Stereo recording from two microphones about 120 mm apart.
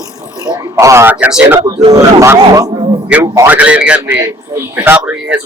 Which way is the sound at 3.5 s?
10° right (ahead or behind).